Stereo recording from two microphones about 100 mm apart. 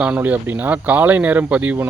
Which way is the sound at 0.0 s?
15° right (ahead or behind).